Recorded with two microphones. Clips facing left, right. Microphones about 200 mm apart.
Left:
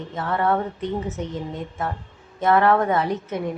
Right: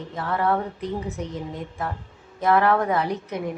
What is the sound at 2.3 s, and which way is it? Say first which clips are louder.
A woman's voice: left 2 dB; centre (ahead or behind).